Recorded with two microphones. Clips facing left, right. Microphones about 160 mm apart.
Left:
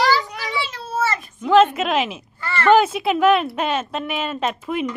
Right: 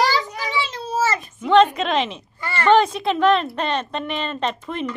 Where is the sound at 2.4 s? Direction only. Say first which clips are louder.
Left 1 dB; 15° right (ahead or behind).